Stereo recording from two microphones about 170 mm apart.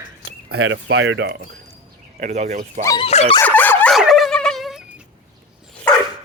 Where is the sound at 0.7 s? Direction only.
90° right.